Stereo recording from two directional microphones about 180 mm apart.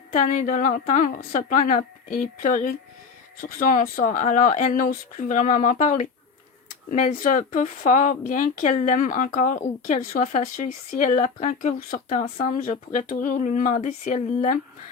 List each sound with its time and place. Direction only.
0.1 s a woman's voice: 45° left (ahead or behind)